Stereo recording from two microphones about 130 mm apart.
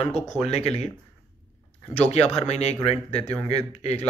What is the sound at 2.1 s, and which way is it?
Speech, 55° left (ahead or behind).